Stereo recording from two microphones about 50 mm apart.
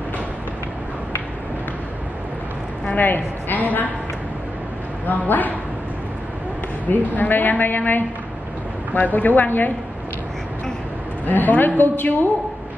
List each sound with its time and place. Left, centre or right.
3.0 s a woman's voice: left
5.0 s a woman's voice: left
6.9 s a woman's voice: left
11.2 s a woman's voice: left